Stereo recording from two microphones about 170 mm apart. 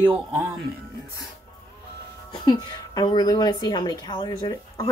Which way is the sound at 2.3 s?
25° left (ahead or behind).